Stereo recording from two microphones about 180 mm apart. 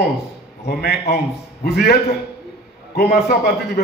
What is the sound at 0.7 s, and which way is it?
A man's voice, 60° left (ahead or behind).